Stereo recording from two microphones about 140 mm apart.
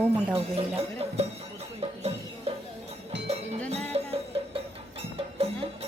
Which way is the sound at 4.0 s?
40° right (ahead or behind).